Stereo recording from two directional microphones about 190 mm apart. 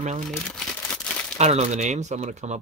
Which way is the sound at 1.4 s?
35° right (ahead or behind).